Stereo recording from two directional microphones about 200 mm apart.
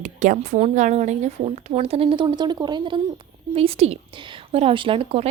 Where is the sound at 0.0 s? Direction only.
35° right (ahead or behind).